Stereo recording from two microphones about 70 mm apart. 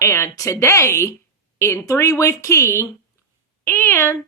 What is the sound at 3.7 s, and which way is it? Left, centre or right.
Speech, left.